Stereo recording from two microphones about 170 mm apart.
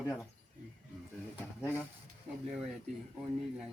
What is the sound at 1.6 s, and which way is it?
Speech, 15° left (ahead or behind).